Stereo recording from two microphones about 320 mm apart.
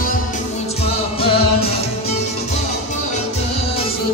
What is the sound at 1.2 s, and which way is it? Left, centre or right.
Music, centre.